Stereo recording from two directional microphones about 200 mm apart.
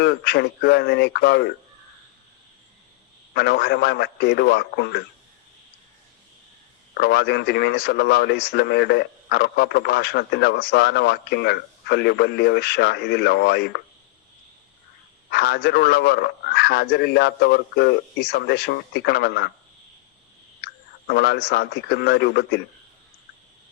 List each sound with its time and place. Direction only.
0.0 s speech: 55° left (ahead or behind)
3.3 s speech: 55° left (ahead or behind)
6.9 s speech: 55° left (ahead or behind)
15.3 s speech: 55° left (ahead or behind)
20.6 s clicking: 55° left (ahead or behind)
21.1 s speech: 55° left (ahead or behind)